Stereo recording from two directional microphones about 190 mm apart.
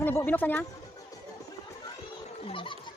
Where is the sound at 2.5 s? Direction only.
25° left (ahead or behind).